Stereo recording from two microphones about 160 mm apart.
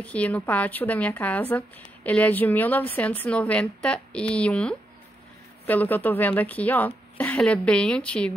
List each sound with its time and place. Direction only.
0.0 s a woman's voice: 10° left (ahead or behind)